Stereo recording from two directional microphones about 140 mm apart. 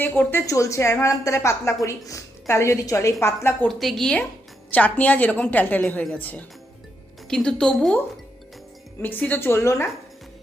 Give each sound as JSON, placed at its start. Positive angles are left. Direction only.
{"t": 0.0, "sound": "a woman's voice", "side_deg": 15}
{"t": 3.7, "sound": "a woman's voice", "side_deg": 0}
{"t": 9.0, "sound": "a woman's voice", "side_deg": 15}